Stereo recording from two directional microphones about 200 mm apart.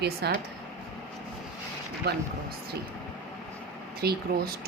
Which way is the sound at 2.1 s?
55° right (ahead or behind).